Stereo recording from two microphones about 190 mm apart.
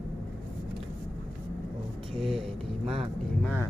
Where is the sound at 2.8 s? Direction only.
30° right (ahead or behind).